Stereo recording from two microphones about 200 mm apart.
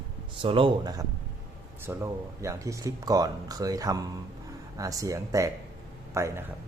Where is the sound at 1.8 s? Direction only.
10° right (ahead or behind).